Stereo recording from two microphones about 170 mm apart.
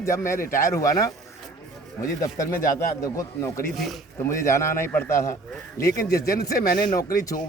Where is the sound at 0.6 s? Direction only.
20° left (ahead or behind).